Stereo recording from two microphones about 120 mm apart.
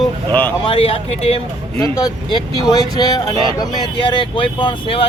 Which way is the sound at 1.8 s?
35° left (ahead or behind).